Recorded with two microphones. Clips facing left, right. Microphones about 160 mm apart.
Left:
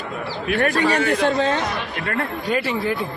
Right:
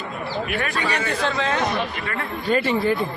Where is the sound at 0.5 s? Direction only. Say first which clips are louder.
Left 9 dB; 45° left (ahead or behind).